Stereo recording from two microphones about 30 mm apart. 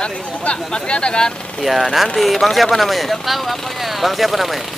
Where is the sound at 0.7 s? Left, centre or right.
Left.